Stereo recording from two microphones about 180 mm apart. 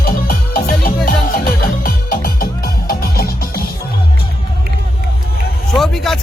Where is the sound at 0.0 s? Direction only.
55° left (ahead or behind).